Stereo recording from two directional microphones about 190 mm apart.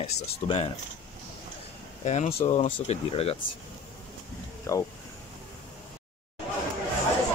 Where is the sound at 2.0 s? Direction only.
35° left (ahead or behind).